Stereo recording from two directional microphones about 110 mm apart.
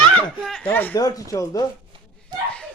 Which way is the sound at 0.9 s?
35° left (ahead or behind).